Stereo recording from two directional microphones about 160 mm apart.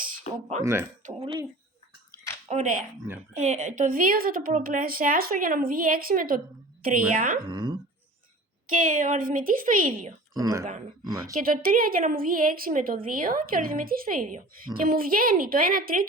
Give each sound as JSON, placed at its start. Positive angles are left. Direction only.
{"t": 0.3, "sound": "speech", "side_deg": 50}
{"t": 0.6, "sound": "a woman's voice", "side_deg": -15}
{"t": 2.5, "sound": "speech", "side_deg": -55}
{"t": 3.0, "sound": "a woman's voice", "side_deg": -15}
{"t": 3.3, "sound": "a woman's voice", "side_deg": -45}
{"t": 7.3, "sound": "speech", "side_deg": -25}
{"t": 8.7, "sound": "a woman's voice", "side_deg": -55}
{"t": 10.3, "sound": "speech", "side_deg": -20}
{"t": 11.3, "sound": "a woman's voice", "side_deg": -60}